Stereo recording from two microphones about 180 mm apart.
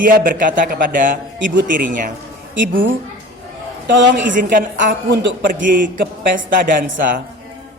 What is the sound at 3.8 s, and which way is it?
Speech, 85° right.